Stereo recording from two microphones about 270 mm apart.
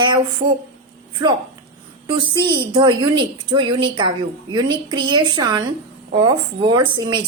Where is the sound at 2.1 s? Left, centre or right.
Centre.